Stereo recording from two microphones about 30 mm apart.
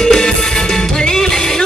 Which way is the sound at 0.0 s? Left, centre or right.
Left.